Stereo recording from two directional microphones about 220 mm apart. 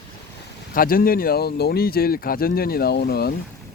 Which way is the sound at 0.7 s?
40° left (ahead or behind).